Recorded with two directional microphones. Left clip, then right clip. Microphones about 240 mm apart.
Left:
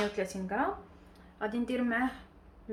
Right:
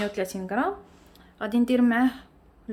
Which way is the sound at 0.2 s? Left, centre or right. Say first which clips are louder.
Right 5 dB; right.